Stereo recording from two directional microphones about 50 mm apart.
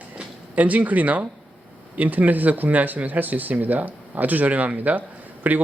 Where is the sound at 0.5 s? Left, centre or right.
Right.